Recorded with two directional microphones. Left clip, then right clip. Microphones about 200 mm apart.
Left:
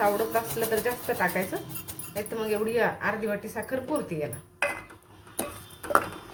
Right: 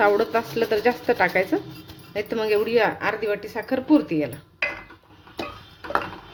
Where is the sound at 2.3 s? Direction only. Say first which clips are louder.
Right 7 dB; 40° right (ahead or behind).